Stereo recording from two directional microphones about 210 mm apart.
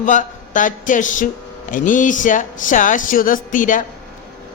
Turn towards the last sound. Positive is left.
turn(degrees=40)  # may be behind; listen again after turning